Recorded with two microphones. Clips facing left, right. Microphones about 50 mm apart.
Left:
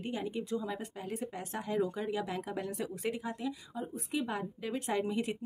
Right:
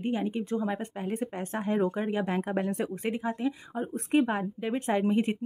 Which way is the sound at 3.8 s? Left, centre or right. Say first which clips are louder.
Right 11 dB; right.